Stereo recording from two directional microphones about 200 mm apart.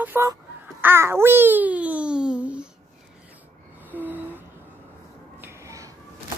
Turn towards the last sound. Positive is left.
turn(degrees=-15)  # may be behind; listen again after turning